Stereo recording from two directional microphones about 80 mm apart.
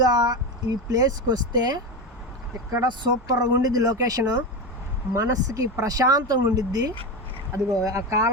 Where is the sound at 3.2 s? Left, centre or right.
Right.